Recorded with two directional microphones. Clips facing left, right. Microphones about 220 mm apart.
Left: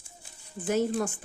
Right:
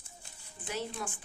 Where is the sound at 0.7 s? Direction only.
45° left (ahead or behind).